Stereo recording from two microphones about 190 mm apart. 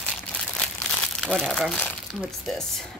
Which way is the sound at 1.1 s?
5° left (ahead or behind).